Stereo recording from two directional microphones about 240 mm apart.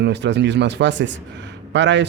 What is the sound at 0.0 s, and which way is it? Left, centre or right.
Speech, right.